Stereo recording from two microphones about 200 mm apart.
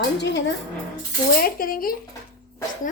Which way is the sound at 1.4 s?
45° left (ahead or behind).